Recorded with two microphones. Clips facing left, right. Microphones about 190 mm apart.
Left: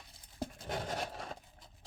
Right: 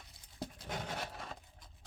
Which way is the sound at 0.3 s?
45° left (ahead or behind).